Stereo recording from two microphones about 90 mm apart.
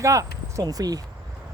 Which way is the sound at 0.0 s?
35° right (ahead or behind).